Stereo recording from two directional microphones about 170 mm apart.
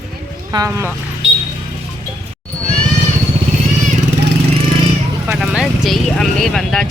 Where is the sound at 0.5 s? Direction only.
20° right (ahead or behind).